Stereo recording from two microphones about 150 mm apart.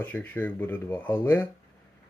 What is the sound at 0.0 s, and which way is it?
Speech, 10° left (ahead or behind).